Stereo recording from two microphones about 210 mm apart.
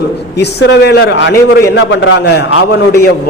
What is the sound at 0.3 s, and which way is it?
A man's voice, 55° left (ahead or behind).